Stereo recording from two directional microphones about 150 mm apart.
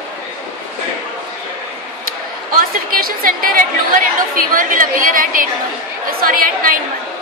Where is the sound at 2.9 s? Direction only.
70° right (ahead or behind).